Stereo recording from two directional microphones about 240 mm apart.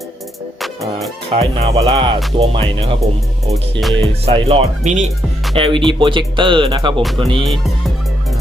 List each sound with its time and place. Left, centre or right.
1.4 s speech: right
3.5 s music: centre
4.3 s speech: right
7.4 s music: centre